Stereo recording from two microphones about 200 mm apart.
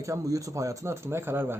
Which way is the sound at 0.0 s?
15° right (ahead or behind).